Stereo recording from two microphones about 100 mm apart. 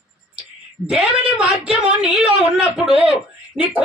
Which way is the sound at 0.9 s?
10° right (ahead or behind).